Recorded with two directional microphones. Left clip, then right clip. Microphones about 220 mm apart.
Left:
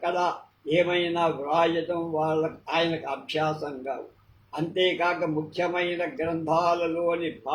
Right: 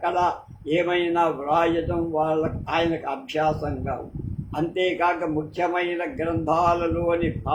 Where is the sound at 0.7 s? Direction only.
20° right (ahead or behind).